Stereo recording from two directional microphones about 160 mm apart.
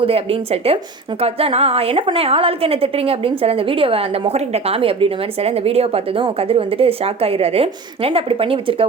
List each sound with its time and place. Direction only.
0.0 s a woman's voice: 35° right (ahead or behind)